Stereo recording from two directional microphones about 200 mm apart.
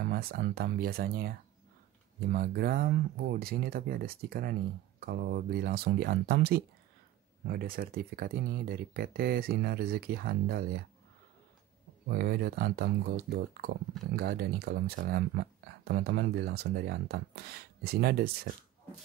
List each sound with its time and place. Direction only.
0.0 s speech: 50° right (ahead or behind)
12.1 s speech: 50° right (ahead or behind)